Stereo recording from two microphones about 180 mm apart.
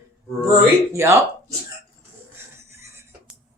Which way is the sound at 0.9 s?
15° right (ahead or behind).